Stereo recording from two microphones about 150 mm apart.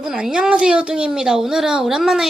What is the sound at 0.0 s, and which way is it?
A woman's voice, 5° right (ahead or behind).